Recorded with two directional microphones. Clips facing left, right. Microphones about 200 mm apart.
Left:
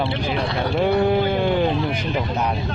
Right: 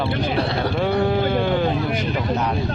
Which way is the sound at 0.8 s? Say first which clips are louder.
Left 3 dB; 15° left (ahead or behind).